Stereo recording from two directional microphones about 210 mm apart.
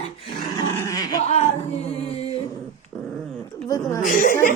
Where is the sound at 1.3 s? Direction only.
30° left (ahead or behind).